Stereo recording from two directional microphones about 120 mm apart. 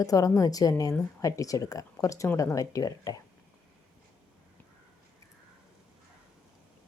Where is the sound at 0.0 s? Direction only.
30° left (ahead or behind).